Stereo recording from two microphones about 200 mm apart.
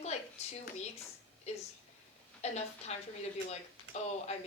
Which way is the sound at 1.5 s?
35° left (ahead or behind).